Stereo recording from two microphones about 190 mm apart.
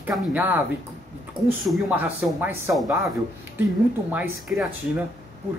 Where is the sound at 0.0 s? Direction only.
10° right (ahead or behind).